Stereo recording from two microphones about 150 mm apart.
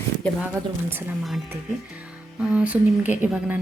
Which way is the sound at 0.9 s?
15° right (ahead or behind).